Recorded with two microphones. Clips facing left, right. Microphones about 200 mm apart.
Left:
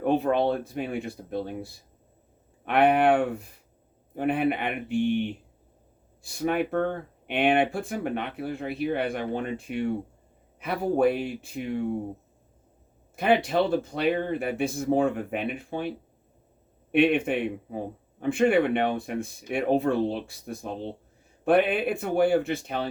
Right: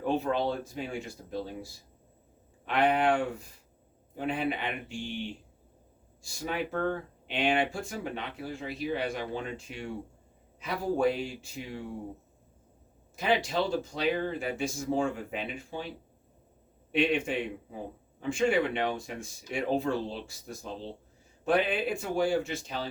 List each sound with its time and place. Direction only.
0.0 s a man's voice: 55° left (ahead or behind)
13.1 s a man's voice: 55° left (ahead or behind)